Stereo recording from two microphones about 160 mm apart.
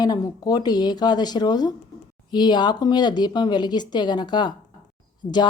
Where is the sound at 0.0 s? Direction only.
20° left (ahead or behind).